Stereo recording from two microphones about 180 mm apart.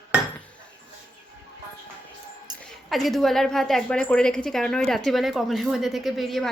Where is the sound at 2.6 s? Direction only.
Centre (ahead or behind).